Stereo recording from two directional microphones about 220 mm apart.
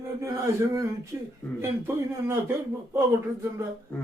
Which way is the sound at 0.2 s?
15° right (ahead or behind).